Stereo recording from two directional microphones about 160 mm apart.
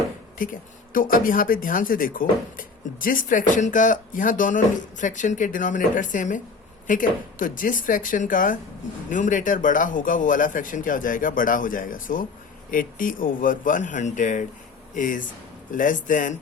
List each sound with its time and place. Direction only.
0.3 s speech: 60° left (ahead or behind)